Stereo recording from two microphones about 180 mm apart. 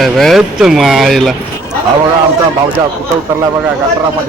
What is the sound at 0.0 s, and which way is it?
Speech, centre (ahead or behind).